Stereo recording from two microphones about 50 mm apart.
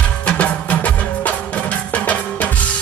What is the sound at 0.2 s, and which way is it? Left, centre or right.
Music, left.